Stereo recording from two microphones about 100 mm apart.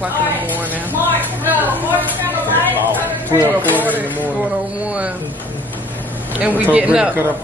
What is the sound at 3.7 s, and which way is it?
Speech, 15° right (ahead or behind).